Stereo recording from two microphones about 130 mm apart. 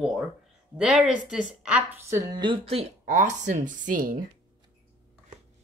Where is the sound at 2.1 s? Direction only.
20° right (ahead or behind).